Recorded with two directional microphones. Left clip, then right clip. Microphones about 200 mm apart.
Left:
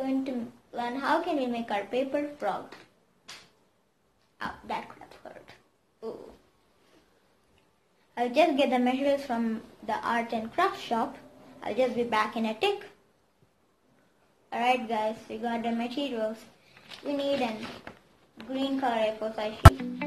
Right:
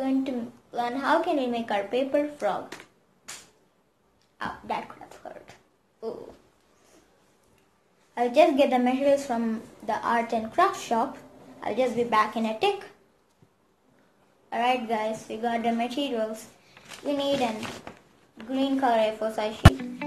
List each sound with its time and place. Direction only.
0.0 s a woman's voice: 5° right (ahead or behind)
4.4 s dog: 5° right (ahead or behind)
8.1 s a woman's voice: centre (ahead or behind)
14.5 s a woman's voice: centre (ahead or behind)
18.5 s a woman's voice: 20° right (ahead or behind)